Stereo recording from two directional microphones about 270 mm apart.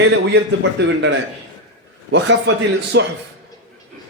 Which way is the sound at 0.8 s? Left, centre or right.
Right.